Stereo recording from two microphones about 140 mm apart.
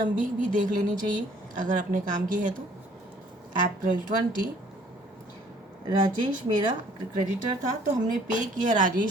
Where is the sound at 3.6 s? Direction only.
80° right.